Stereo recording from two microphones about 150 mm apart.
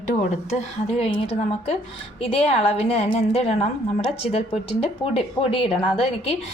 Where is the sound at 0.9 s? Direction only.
40° left (ahead or behind).